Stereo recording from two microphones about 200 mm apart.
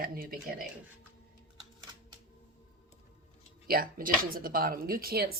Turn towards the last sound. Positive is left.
turn(degrees=-50)  # may be behind; listen again after turning